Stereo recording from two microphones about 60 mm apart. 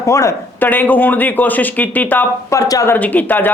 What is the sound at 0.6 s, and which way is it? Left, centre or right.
A man's voice, left.